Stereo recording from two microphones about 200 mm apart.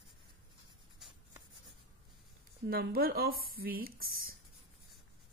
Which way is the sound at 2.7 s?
50° right (ahead or behind).